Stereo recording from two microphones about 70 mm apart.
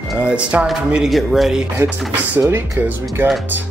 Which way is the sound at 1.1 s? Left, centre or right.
Centre.